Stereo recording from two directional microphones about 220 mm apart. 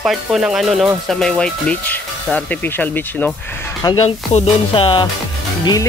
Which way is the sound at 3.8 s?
20° left (ahead or behind).